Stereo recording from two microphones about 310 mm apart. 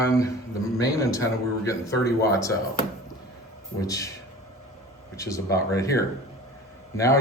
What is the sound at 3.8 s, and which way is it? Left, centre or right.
Speech, centre.